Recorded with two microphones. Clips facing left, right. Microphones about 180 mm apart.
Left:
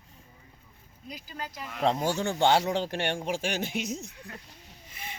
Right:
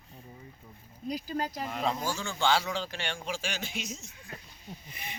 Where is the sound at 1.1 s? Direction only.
40° right (ahead or behind).